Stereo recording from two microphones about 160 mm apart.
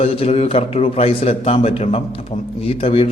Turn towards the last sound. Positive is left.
turn(degrees=35)  # may be behind; listen again after turning